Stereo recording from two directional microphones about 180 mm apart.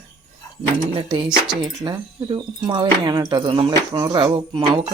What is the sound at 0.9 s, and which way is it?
Speech, 30° right (ahead or behind).